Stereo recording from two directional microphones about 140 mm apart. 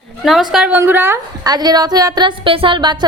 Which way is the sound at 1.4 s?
30° right (ahead or behind).